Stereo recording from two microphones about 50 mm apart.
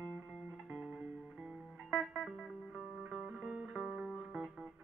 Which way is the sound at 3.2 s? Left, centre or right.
Right.